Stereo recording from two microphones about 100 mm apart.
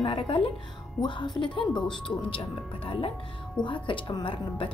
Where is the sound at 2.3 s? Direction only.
65° left (ahead or behind).